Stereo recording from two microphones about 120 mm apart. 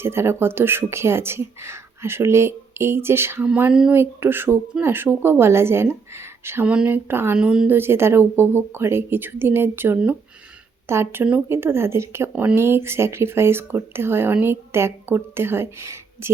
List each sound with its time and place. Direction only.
0.0 s speech: 20° right (ahead or behind)
7.3 s a woman's voice: 5° right (ahead or behind)
7.8 s speech: 20° right (ahead or behind)
12.3 s a woman's voice: 10° right (ahead or behind)
12.5 s speech: 20° right (ahead or behind)